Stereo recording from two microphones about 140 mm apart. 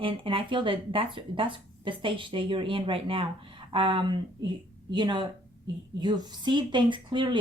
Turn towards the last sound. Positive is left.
turn(degrees=-35)  # may be behind; listen again after turning